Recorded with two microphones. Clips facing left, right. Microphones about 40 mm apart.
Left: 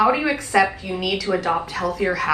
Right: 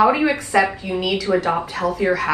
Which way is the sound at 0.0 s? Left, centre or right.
Centre.